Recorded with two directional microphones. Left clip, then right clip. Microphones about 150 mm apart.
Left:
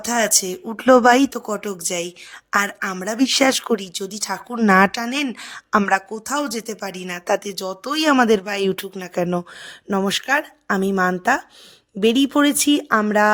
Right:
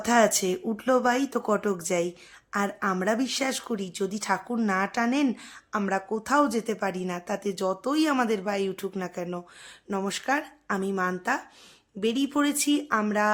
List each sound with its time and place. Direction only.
0.2 s speech: 65° left (ahead or behind)
1.3 s speech: 5° right (ahead or behind)
2.0 s a woman's voice: 80° left
2.9 s speech: centre (ahead or behind)
3.2 s speech: 70° left (ahead or behind)
4.2 s speech: 5° left (ahead or behind)
4.6 s speech: 70° left (ahead or behind)
6.1 s speech: centre (ahead or behind)
6.4 s speech: 70° left (ahead or behind); by 13.3 s 50° left (ahead or behind)